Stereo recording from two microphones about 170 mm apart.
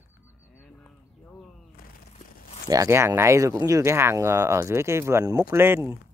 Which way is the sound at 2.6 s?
20° right (ahead or behind).